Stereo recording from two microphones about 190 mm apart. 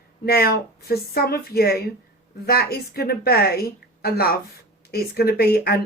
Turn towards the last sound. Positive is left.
turn(degrees=55)  # may be behind; listen again after turning